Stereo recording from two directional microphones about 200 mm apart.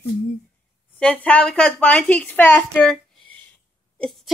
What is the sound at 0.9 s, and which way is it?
A woman's voice, 5° left (ahead or behind).